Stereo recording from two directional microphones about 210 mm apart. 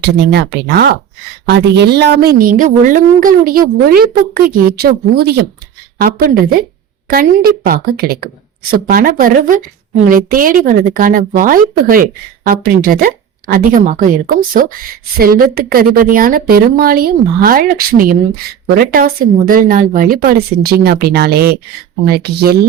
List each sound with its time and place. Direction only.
0.0 s a woman's voice: 50° right (ahead or behind)
15.2 s speech: 45° right (ahead or behind)